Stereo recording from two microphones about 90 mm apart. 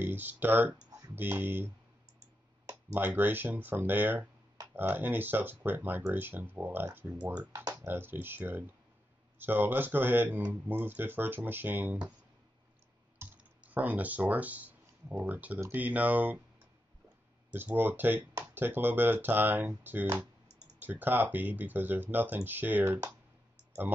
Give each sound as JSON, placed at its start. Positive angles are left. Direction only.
{"t": 0.0, "sound": "speech", "side_deg": -20}
{"t": 2.9, "sound": "speech", "side_deg": -20}
{"t": 13.2, "sound": "speech", "side_deg": -15}
{"t": 17.5, "sound": "speech", "side_deg": -20}